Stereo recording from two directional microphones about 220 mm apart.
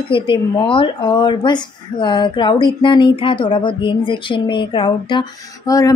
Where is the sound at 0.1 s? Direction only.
25° left (ahead or behind).